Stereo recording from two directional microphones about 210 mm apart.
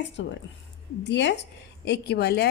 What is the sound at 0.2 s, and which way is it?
A woman's voice, 60° left (ahead or behind).